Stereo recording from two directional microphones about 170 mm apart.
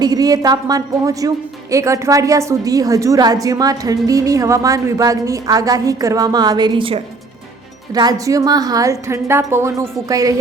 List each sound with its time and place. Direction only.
0.0 s a woman's voice: 20° right (ahead or behind)